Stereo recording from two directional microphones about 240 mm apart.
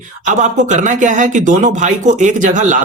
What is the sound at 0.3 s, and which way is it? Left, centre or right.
Speech, right.